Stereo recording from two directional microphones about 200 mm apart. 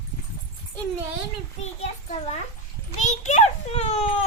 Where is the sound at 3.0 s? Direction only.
35° left (ahead or behind).